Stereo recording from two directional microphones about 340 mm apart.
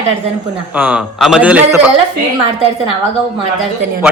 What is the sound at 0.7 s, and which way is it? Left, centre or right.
Speech, centre.